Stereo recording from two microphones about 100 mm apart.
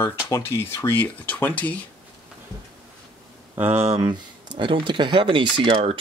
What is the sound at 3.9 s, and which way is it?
Speech, 45° right (ahead or behind).